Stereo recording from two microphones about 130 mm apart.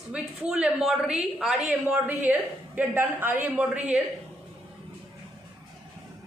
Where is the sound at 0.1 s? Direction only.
5° right (ahead or behind).